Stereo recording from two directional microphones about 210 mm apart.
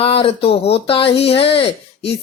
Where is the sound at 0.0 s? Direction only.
25° left (ahead or behind).